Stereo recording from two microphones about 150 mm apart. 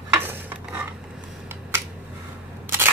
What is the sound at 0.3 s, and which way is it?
Stir, 10° right (ahead or behind).